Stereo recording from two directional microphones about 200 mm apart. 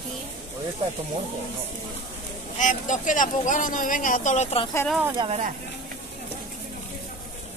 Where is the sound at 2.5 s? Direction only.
40° left (ahead or behind).